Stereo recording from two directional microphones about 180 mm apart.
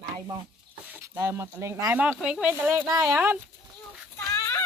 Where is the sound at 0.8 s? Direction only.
10° right (ahead or behind).